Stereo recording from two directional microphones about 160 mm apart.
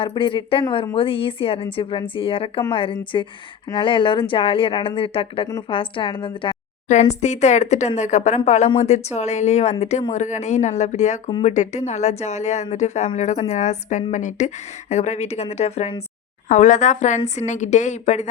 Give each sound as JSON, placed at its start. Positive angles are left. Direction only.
{"t": 0.0, "sound": "speech", "side_deg": 30}
{"t": 6.8, "sound": "a woman's voice", "side_deg": 45}